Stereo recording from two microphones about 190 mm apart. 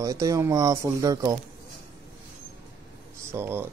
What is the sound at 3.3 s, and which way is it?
Speech, 10° right (ahead or behind).